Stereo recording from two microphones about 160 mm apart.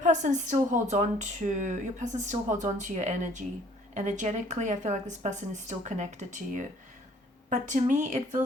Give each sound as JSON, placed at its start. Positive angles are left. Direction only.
{"t": 0.0, "sound": "speech", "side_deg": -50}